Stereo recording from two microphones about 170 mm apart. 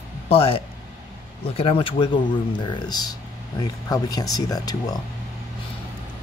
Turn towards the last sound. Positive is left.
turn(degrees=20)  # may be behind; listen again after turning